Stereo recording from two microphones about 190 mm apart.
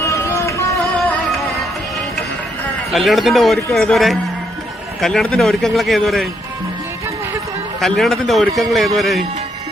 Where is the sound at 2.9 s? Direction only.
Centre (ahead or behind).